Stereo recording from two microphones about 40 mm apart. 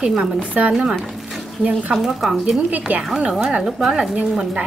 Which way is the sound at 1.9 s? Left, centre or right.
Centre.